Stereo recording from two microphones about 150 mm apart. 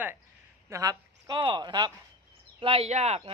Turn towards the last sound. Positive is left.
turn(degrees=-45)  # may be behind; listen again after turning